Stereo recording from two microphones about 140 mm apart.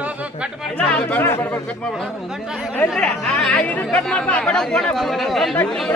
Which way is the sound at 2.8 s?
5° left (ahead or behind).